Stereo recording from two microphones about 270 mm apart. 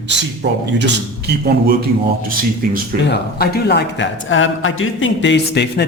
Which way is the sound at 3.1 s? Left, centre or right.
Left.